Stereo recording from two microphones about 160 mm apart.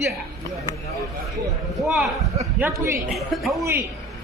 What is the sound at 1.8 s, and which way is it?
Speech, 5° right (ahead or behind).